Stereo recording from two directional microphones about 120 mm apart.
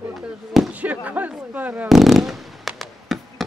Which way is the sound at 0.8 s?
15° right (ahead or behind).